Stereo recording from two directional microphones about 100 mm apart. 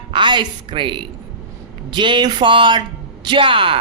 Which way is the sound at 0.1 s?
55° right (ahead or behind).